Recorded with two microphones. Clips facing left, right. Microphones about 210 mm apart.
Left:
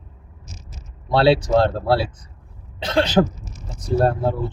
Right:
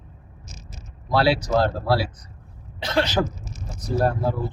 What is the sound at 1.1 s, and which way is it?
Speech, 25° left (ahead or behind).